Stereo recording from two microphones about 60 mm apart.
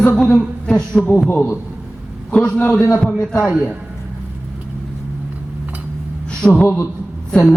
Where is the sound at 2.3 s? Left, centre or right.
Centre.